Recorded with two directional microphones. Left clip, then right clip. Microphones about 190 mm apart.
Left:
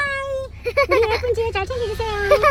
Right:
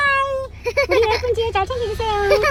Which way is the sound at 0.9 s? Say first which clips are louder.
Right 1 dB; 5° left (ahead or behind).